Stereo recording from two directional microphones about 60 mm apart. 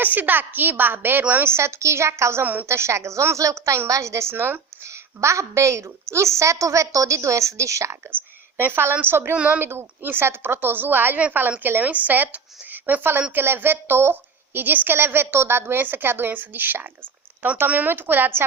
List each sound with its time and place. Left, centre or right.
0.0 s a woman's voice: right
1.5 s a woman's voice: right
2.4 s a woman's voice: right
2.6 s a woman's voice: right
5.2 s a woman's voice: right
8.5 s a woman's voice: right
9.3 s speech: right
9.6 s a woman's voice: right